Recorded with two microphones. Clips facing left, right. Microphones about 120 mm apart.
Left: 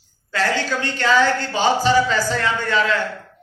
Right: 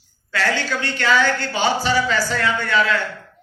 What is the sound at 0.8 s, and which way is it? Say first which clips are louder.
Speech: left 1 dB; 35° left (ahead or behind).